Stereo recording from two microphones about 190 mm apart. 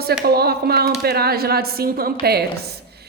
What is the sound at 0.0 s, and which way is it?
A woman's voice, 55° right (ahead or behind).